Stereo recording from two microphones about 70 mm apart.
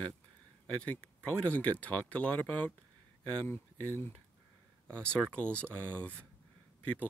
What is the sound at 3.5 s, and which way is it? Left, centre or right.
Speech, left.